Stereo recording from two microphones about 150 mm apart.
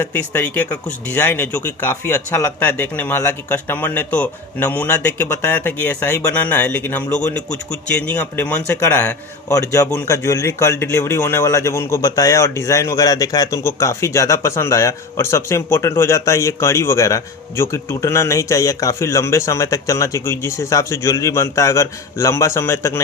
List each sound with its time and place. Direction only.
0.0 s speech: 10° left (ahead or behind)